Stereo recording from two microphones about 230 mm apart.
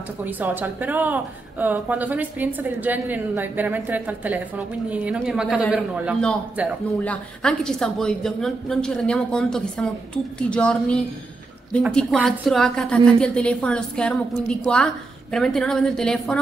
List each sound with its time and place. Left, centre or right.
0.2 s a woman's voice: centre